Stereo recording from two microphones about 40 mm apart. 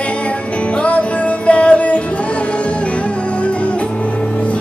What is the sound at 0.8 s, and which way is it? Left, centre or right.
Music, left.